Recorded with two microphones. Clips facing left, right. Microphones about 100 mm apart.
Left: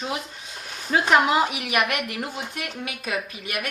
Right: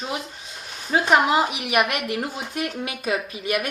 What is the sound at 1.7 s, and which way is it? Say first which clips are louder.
Speech: right 2 dB; 25° right (ahead or behind).